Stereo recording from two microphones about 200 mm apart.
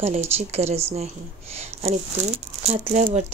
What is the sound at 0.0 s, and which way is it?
Speech, 35° right (ahead or behind).